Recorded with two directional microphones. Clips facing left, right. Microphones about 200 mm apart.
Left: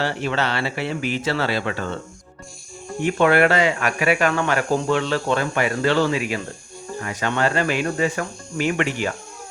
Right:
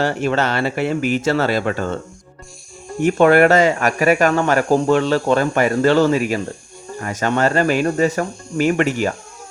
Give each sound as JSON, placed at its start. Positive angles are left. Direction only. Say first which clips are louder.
{"t": 0.0, "sound": "speech", "louder": "right 5 dB", "side_deg": -45}
{"t": 3.0, "sound": "speech", "louder": "right 5 dB", "side_deg": -45}